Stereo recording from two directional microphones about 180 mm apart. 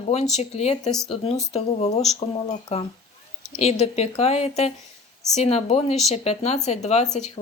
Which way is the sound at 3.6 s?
35° left (ahead or behind).